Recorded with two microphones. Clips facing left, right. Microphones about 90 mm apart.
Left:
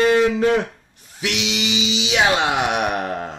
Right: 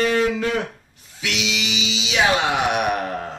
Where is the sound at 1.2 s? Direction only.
30° left (ahead or behind).